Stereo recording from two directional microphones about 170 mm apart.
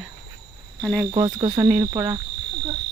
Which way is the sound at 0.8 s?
5° left (ahead or behind).